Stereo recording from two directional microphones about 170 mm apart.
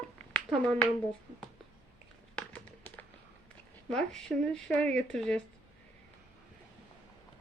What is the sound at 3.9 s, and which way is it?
A woman's voice, 5° left (ahead or behind).